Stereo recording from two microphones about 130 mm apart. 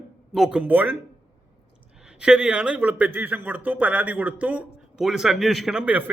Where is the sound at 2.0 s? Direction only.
5° right (ahead or behind).